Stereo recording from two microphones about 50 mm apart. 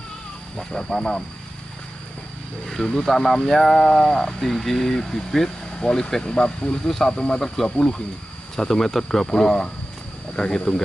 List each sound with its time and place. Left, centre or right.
0.6 s speech: centre
2.6 s speech: centre